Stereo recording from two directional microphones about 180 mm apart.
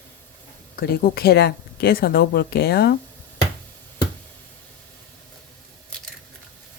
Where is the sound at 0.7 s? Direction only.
60° left (ahead or behind).